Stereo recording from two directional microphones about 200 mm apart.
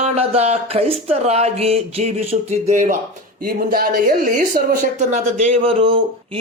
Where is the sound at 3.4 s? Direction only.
45° right (ahead or behind).